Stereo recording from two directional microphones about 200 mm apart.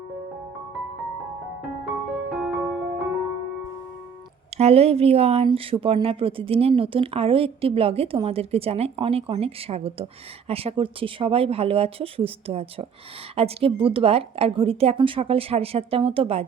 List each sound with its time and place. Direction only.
1.9 s music: centre (ahead or behind)
4.5 s speech: 30° right (ahead or behind)